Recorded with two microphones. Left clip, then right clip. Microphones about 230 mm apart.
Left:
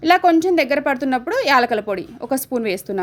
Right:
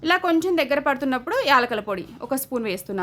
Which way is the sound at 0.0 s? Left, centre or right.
Centre.